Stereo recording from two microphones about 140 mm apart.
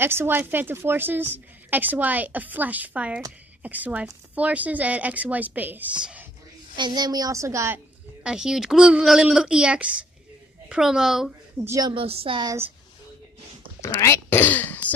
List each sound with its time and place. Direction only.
0.0 s a woman's voice: 15° right (ahead or behind)
6.8 s a woman's voice: 30° right (ahead or behind)
8.2 s speech: 5° right (ahead or behind)
11.6 s a woman's voice: 20° right (ahead or behind)
11.9 s a woman's voice: 40° right (ahead or behind)
13.7 s a sound: 20° left (ahead or behind)